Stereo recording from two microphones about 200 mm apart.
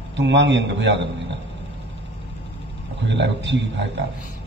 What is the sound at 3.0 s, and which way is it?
Speech, 65° right (ahead or behind).